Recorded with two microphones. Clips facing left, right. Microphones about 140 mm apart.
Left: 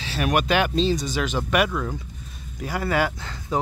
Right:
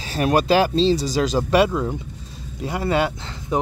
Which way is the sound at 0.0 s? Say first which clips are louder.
Right 4 dB; 40° right (ahead or behind).